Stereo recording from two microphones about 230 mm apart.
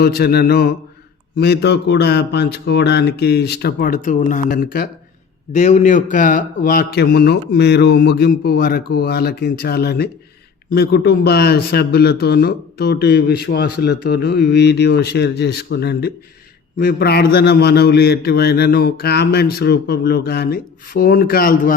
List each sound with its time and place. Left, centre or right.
0.0 s a man's voice: left